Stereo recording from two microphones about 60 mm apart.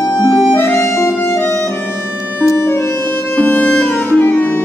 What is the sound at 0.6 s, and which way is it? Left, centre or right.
Music, left.